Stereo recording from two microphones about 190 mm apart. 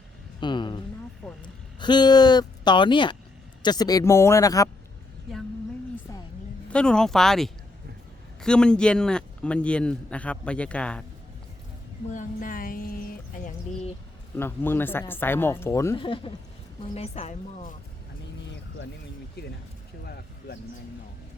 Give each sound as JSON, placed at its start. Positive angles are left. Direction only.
{"t": 0.3, "sound": "speech", "side_deg": 25}
{"t": 1.2, "sound": "speech", "side_deg": 5}
{"t": 1.8, "sound": "speech", "side_deg": 25}
{"t": 6.7, "sound": "a man's voice", "side_deg": 5}
{"t": 12.1, "sound": "music", "side_deg": 45}
{"t": 14.3, "sound": "speech", "side_deg": 10}
{"t": 16.0, "sound": "a woman's voice", "side_deg": 25}
{"t": 19.4, "sound": "speech", "side_deg": 55}
{"t": 20.1, "sound": "a sound", "side_deg": 55}